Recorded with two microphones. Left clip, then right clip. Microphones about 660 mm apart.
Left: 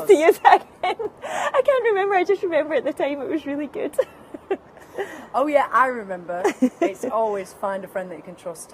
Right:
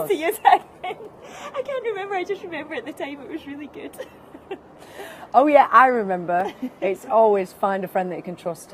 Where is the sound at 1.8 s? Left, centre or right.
Left.